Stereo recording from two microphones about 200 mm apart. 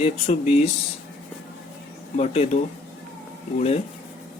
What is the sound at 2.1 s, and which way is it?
Speech, 35° left (ahead or behind).